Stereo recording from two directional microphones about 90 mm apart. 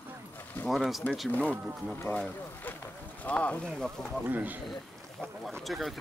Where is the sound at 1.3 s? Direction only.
15° left (ahead or behind).